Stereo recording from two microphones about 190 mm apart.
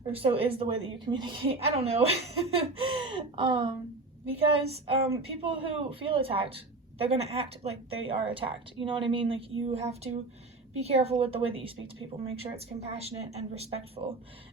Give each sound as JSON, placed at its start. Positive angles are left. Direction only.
{"t": 0.0, "sound": "a woman's voice", "side_deg": -30}